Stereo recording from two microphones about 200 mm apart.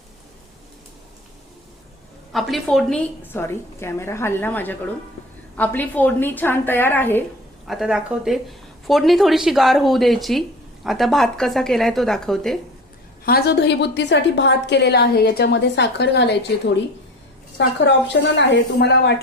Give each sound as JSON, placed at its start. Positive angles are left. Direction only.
{"t": 2.3, "sound": "a woman's voice", "side_deg": 0}
{"t": 7.7, "sound": "speech", "side_deg": 0}
{"t": 13.2, "sound": "a woman's voice", "side_deg": 50}
{"t": 17.8, "sound": "a woman's voice", "side_deg": 60}